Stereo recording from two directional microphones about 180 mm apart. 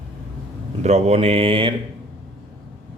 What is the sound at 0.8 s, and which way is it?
Speech, 40° right (ahead or behind).